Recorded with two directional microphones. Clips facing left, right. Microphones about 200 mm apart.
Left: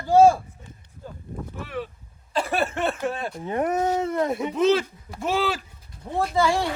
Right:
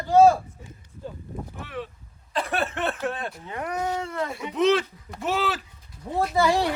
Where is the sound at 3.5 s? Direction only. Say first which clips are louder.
Left 6 dB; 45° left (ahead or behind).